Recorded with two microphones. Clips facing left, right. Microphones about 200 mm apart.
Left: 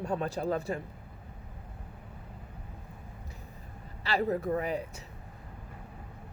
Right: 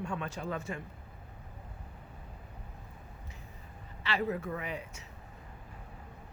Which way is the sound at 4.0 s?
35° left (ahead or behind).